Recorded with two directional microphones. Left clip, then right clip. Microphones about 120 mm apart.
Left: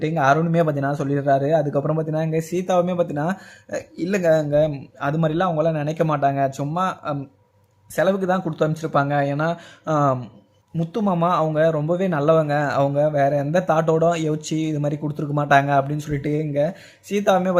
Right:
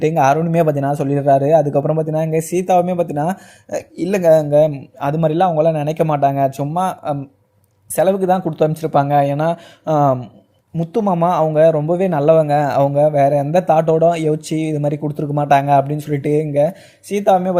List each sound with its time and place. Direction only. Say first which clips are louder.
0.0 s speech: right 5 dB; 25° right (ahead or behind)